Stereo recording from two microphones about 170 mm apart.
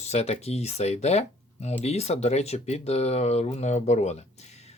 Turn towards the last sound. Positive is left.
turn(degrees=40)  # may be behind; listen again after turning